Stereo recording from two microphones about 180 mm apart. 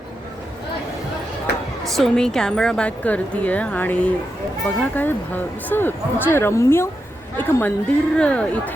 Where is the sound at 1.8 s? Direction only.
Centre (ahead or behind).